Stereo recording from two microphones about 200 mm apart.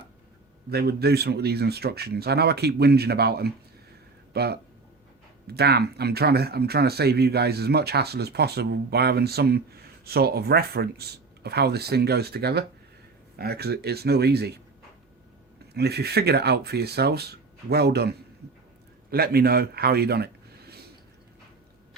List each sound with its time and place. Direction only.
0.7 s speech: 50° right (ahead or behind)
15.7 s speech: 55° right (ahead or behind)